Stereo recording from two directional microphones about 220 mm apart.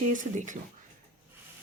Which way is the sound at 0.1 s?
35° right (ahead or behind).